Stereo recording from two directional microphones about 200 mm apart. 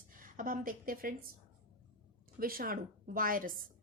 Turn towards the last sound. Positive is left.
turn(degrees=-45)  # may be behind; listen again after turning